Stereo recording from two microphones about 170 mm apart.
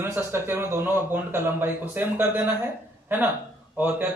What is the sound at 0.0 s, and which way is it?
A man's voice, 10° right (ahead or behind).